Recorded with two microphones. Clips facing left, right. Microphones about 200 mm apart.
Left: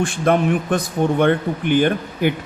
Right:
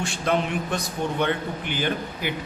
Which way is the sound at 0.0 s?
50° left (ahead or behind).